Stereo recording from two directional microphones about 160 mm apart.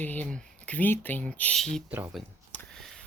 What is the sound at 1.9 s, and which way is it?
Speech, 15° right (ahead or behind).